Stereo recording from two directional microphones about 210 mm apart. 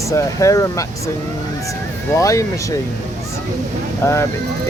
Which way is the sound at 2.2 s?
15° left (ahead or behind).